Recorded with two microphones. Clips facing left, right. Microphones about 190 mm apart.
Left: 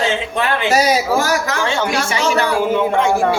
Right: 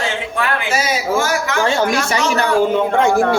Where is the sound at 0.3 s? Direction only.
25° left (ahead or behind).